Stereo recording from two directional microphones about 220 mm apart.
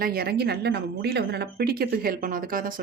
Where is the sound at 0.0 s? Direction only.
45° right (ahead or behind).